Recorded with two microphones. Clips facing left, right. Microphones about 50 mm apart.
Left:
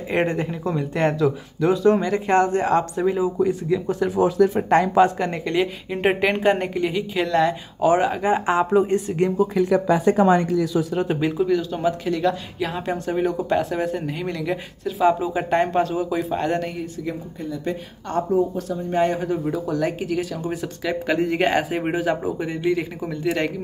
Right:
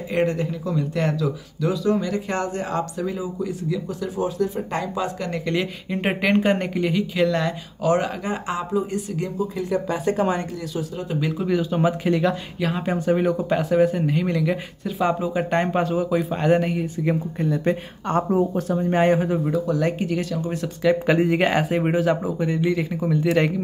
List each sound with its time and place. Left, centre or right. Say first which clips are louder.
0.1 s speech: even; left
4.2 s speech: left 6 dB; left
5.5 s speech: even; centre
7.8 s speech: left 3 dB; centre
8.3 s speech: left 7 dB; left
8.7 s speech: left 6 dB; left
9.4 s speech: left 5 dB; left
11.4 s speech: right 2 dB; centre
12.2 s speech: even; centre
17.0 s speech: right 6 dB; right
19.3 s speech: right 2 dB; centre
21.1 s speech: left 1 dB; centre
21.4 s speech: even; centre